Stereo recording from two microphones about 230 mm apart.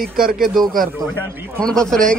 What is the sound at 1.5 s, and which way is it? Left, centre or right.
Speech, centre.